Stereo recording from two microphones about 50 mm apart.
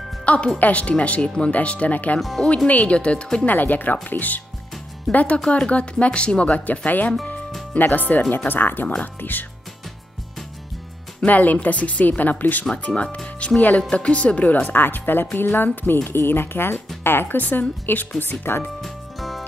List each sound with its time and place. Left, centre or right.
0.2 s music: left
0.6 s speech: left
2.1 s speech: centre
2.4 s speech: left
3.4 s a woman's voice: left
11.1 s a woman's voice: left
12.7 s a woman's voice: left
18.6 s music: centre